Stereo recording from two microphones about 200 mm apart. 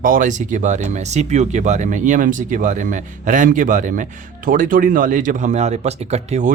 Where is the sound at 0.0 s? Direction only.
40° right (ahead or behind).